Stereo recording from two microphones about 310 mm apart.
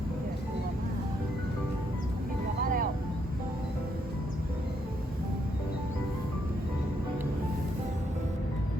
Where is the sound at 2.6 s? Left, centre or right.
Right.